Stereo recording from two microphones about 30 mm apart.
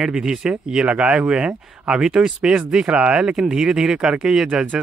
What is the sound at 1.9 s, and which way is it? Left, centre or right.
Speech, right.